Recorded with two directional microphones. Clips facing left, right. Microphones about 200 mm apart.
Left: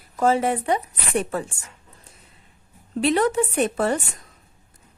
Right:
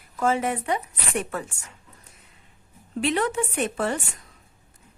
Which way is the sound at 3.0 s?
40° left (ahead or behind).